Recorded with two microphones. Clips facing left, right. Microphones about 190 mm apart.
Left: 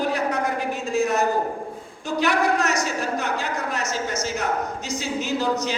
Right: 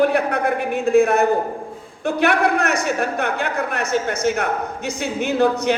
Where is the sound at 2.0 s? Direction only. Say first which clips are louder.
Right 4 dB; 60° right (ahead or behind).